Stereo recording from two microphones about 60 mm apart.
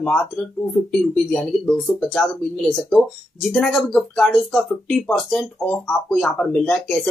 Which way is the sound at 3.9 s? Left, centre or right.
Centre.